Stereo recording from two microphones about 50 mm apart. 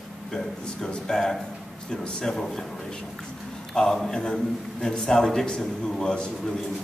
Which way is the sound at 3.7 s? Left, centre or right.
Centre.